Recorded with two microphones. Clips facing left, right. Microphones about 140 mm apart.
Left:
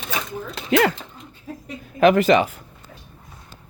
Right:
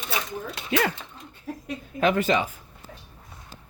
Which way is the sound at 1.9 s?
75° left (ahead or behind).